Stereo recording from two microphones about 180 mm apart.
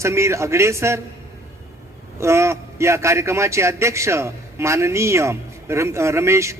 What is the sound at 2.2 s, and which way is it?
A man's voice, 15° right (ahead or behind).